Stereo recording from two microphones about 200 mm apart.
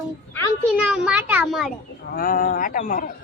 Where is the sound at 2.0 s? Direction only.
45° left (ahead or behind).